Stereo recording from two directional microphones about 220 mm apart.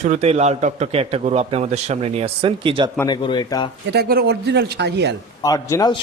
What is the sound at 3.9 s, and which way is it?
Speech, 45° right (ahead or behind).